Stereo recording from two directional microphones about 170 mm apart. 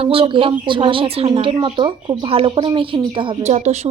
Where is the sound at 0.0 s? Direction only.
35° right (ahead or behind).